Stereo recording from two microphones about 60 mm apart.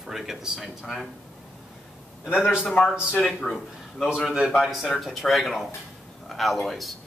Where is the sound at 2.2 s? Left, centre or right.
Left.